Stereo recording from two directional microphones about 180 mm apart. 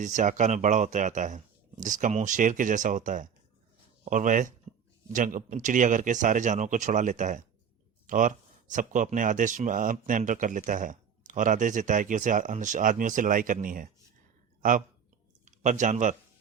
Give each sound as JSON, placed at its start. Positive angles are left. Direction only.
{"t": 0.0, "sound": "speech", "side_deg": -45}
{"t": 15.4, "sound": "speech", "side_deg": -45}